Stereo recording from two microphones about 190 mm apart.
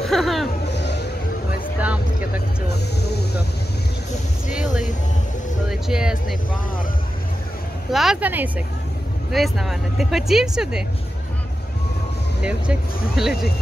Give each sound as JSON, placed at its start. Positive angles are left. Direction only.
{"t": 0.0, "sound": "music", "side_deg": 0}
{"t": 0.7, "sound": "music", "side_deg": 65}
{"t": 1.8, "sound": "a sound", "side_deg": -10}
{"t": 4.5, "sound": "speech", "side_deg": -5}
{"t": 7.9, "sound": "speech", "side_deg": 0}
{"t": 12.4, "sound": "speech", "side_deg": -5}